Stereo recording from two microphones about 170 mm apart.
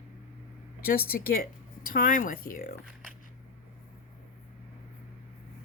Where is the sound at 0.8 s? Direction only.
60° left (ahead or behind).